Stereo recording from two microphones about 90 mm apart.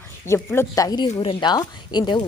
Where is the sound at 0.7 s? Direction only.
40° left (ahead or behind).